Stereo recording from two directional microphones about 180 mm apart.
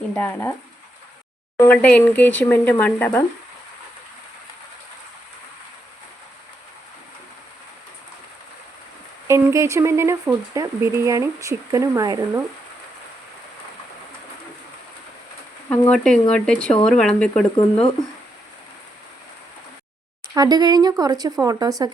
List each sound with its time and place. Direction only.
0.2 s speech: 15° left (ahead or behind)
1.5 s speech: 10° left (ahead or behind)
9.2 s speech: 15° right (ahead or behind)
15.9 s speech: 5° left (ahead or behind)
17.6 s speech: 30° left (ahead or behind)
20.3 s speech: 20° right (ahead or behind)